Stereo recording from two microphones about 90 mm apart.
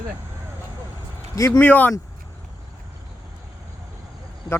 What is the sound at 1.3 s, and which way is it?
Speech, 40° left (ahead or behind).